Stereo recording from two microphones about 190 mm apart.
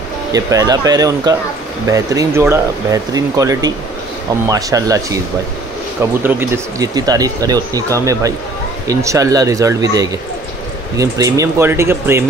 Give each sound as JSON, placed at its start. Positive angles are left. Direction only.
{"t": 0.3, "sound": "speech", "side_deg": -20}
{"t": 6.2, "sound": "speech", "side_deg": -10}